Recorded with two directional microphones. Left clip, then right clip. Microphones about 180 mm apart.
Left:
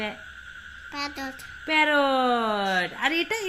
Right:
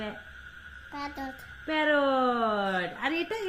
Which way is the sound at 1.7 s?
30° left (ahead or behind).